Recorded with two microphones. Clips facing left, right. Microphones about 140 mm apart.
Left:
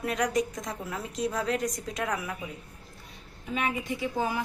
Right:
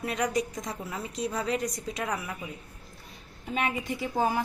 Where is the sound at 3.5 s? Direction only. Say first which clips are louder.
Even; 40° right (ahead or behind).